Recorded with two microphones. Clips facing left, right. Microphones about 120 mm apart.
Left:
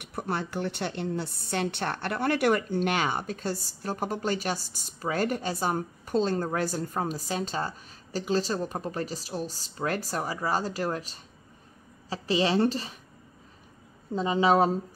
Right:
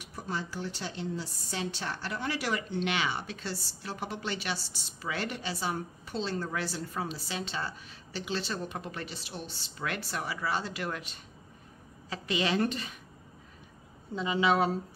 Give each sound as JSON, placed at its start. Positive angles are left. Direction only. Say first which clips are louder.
{"t": 0.0, "sound": "a woman's voice", "louder": "left 5 dB", "side_deg": 60}
{"t": 14.1, "sound": "a woman's voice", "louder": "left 4 dB", "side_deg": 35}